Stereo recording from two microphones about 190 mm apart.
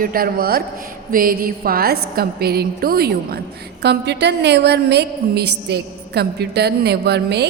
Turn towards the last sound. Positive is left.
turn(degrees=-60)  # may be behind; listen again after turning